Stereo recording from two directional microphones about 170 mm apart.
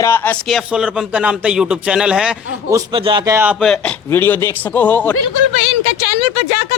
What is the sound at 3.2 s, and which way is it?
Speech, 15° right (ahead or behind).